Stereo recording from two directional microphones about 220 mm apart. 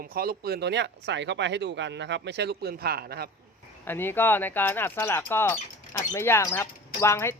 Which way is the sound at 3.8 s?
10° left (ahead or behind).